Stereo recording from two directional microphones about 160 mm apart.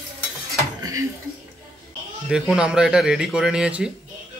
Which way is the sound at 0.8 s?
20° right (ahead or behind).